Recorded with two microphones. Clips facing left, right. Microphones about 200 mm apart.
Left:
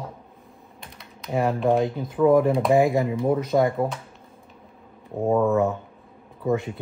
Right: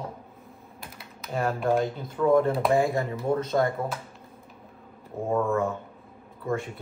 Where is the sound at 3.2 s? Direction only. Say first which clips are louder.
Left 4 dB; centre (ahead or behind).